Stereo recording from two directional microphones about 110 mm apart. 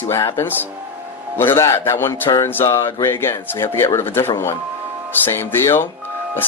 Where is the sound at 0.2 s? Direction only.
25° left (ahead or behind).